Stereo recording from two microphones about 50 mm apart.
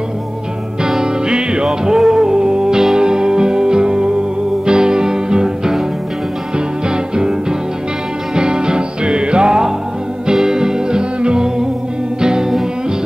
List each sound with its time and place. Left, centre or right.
0.8 s music: centre
8.4 s music: centre